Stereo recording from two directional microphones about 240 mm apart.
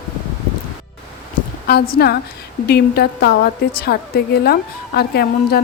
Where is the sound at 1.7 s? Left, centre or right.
Left.